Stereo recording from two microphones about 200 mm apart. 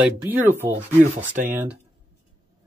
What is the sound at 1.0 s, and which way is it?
Speech, 40° right (ahead or behind).